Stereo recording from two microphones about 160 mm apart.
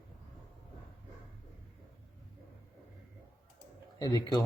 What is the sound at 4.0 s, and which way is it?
Speech, 25° left (ahead or behind).